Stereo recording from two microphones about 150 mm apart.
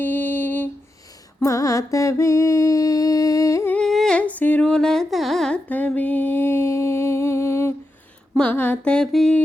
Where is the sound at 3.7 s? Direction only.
5° left (ahead or behind).